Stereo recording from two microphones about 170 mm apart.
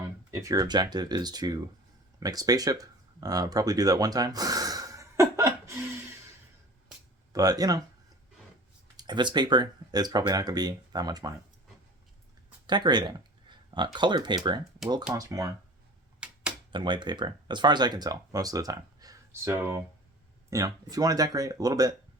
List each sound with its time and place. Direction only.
0.0 s speech: 20° right (ahead or behind)
2.2 s a sound: 20° right (ahead or behind)
7.3 s speech: 20° right (ahead or behind)
9.0 s speech: 25° right (ahead or behind)
12.6 s speech: 25° right (ahead or behind)
16.2 s a sound: 5° right (ahead or behind)
16.7 s speech: 25° right (ahead or behind)